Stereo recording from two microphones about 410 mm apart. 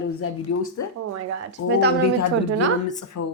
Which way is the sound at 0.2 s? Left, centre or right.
Left.